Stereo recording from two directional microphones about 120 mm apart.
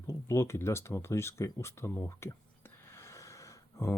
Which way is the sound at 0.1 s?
25° left (ahead or behind).